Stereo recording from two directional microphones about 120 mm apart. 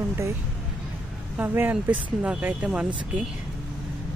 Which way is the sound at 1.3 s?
15° right (ahead or behind).